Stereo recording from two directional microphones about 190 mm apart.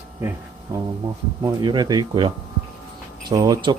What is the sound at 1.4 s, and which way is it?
Speech, 20° right (ahead or behind).